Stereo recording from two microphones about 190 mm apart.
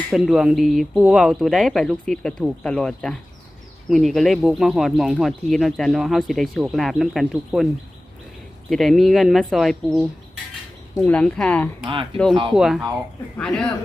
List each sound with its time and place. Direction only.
0.1 s speech: centre (ahead or behind)
8.7 s speech: centre (ahead or behind)
12.3 s speech: 25° right (ahead or behind)
12.5 s speech: centre (ahead or behind)